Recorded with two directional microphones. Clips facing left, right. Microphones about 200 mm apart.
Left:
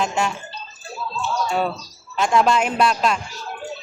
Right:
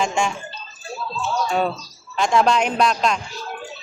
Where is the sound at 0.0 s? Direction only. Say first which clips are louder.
Right 1 dB; 5° left (ahead or behind).